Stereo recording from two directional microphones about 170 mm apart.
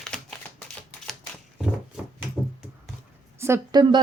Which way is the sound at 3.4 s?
15° right (ahead or behind).